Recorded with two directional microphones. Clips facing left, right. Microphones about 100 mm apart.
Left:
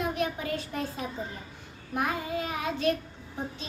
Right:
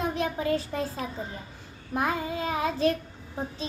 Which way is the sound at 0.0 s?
30° right (ahead or behind).